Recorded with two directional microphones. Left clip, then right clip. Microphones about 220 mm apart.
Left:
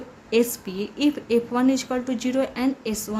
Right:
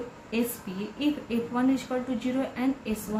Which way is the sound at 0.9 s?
55° left (ahead or behind).